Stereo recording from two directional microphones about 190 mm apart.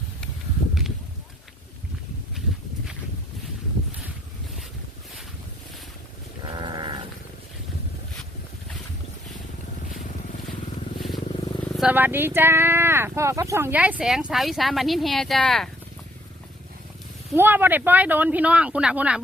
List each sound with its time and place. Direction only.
6.4 s sheep: 25° right (ahead or behind)
11.6 s vehicle: 5° left (ahead or behind)
11.9 s speech: 10° right (ahead or behind)
17.3 s speech: 10° right (ahead or behind)